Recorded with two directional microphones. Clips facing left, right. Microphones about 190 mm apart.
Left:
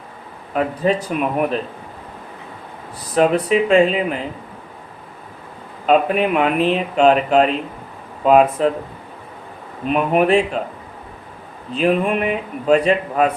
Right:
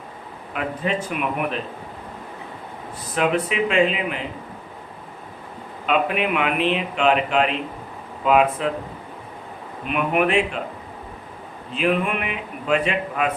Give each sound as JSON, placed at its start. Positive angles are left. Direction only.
{"t": 0.5, "sound": "speech", "side_deg": 35}
{"t": 3.2, "sound": "speech", "side_deg": 40}
{"t": 5.8, "sound": "speech", "side_deg": 40}
{"t": 9.8, "sound": "speech", "side_deg": 35}
{"t": 11.7, "sound": "speech", "side_deg": 35}